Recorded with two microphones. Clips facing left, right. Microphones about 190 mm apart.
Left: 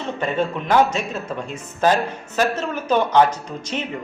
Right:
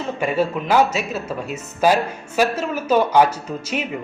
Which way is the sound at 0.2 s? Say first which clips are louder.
Right 2 dB; 10° right (ahead or behind).